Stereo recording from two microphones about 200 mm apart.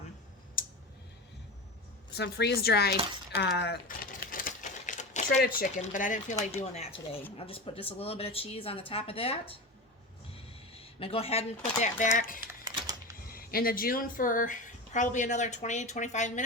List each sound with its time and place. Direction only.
2.1 s speech: 55° left (ahead or behind)
3.6 s typewriter: 50° left (ahead or behind); by 5.4 s 35° left (ahead or behind)
5.4 s speech: 45° left (ahead or behind)
6.7 s speech: 30° left (ahead or behind)
10.8 s speech: 30° left (ahead or behind)
12.6 s a sound: 20° right (ahead or behind)
13.3 s speech: 45° left (ahead or behind)